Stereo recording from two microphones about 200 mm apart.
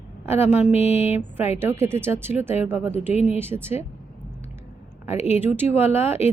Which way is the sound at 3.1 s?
30° left (ahead or behind).